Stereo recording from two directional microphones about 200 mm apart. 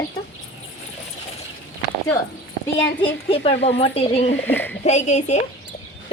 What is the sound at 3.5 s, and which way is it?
Speech, 60° left (ahead or behind).